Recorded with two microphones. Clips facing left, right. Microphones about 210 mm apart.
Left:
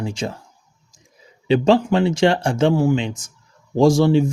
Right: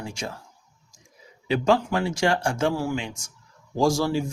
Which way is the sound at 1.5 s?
25° left (ahead or behind).